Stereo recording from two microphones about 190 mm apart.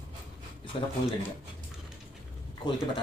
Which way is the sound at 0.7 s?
30° left (ahead or behind).